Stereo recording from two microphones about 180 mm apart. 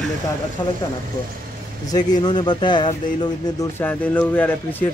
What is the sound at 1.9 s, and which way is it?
A man's voice, 20° left (ahead or behind).